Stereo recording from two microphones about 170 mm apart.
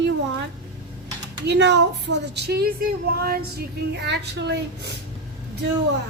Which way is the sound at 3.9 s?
80° right.